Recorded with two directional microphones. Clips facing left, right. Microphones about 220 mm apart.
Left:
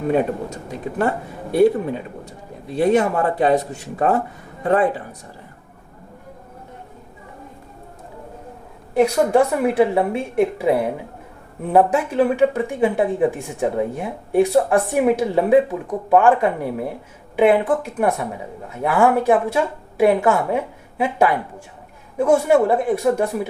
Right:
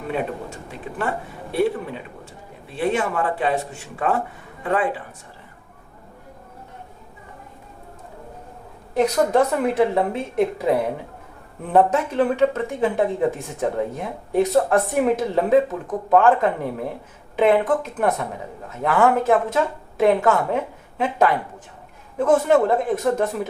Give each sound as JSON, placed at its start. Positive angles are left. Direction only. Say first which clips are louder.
{"t": 0.1, "sound": "a man's voice", "louder": "left 6 dB", "side_deg": 40}
{"t": 9.0, "sound": "speech", "louder": "left 2 dB", "side_deg": 10}